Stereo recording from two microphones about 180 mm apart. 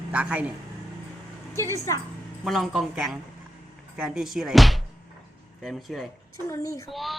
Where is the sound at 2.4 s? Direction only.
Centre (ahead or behind).